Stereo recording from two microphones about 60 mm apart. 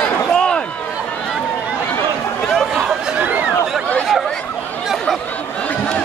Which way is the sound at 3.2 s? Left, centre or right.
Right.